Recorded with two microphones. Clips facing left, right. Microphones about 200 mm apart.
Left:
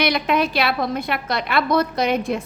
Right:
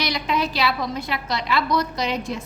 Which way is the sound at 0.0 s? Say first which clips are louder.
Left 5 dB; 60° left (ahead or behind).